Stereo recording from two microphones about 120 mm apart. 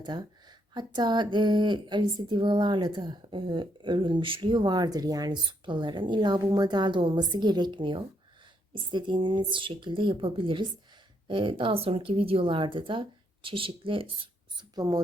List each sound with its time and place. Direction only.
0.0 s speech: 35° right (ahead or behind)
14.8 s speech: 30° right (ahead or behind)